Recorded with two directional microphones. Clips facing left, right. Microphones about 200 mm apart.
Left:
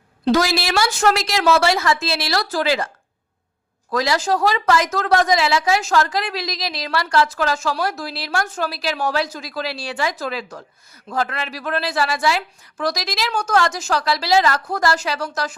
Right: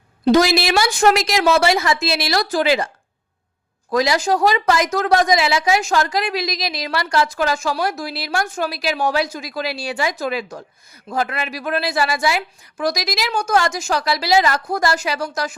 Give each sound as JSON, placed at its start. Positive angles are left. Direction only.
{"t": 0.3, "sound": "speech", "side_deg": -20}